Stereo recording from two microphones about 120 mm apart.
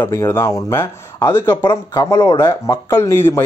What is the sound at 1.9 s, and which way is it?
Speech, 30° left (ahead or behind).